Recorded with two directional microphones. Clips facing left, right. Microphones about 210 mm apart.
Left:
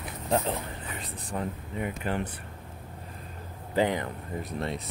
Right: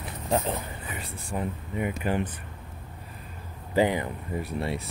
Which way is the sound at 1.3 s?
15° right (ahead or behind).